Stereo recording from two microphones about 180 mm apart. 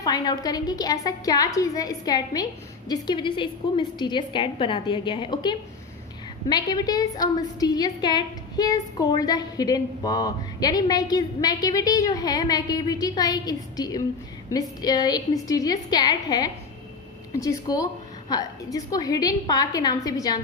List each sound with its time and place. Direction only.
0.0 s a woman's voice: 20° left (ahead or behind)